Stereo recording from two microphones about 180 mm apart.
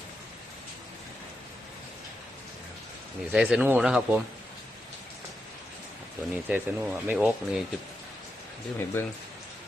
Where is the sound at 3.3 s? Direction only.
10° right (ahead or behind).